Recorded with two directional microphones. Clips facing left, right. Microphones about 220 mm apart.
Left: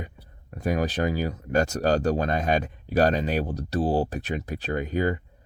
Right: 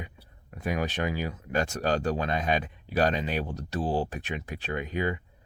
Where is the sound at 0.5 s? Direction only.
40° left (ahead or behind).